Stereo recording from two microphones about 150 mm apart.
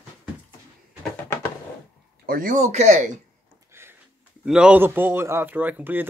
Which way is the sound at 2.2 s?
70° right (ahead or behind).